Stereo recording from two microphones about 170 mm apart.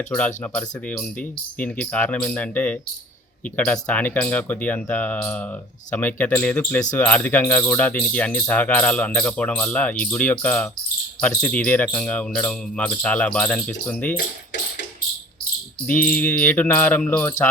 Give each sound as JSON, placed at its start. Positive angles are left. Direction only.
{"t": 0.1, "sound": "speech", "side_deg": 10}
{"t": 14.2, "sound": "a sound", "side_deg": 55}
{"t": 15.9, "sound": "speech", "side_deg": 10}